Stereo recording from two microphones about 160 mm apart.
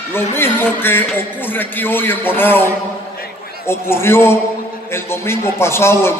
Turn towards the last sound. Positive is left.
turn(degrees=15)  # may be behind; listen again after turning